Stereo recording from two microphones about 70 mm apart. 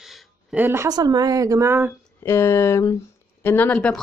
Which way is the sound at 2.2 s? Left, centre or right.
Left.